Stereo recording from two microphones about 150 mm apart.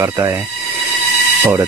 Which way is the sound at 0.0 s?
20° right (ahead or behind).